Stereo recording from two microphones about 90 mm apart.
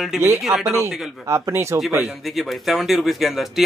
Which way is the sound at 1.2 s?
30° right (ahead or behind).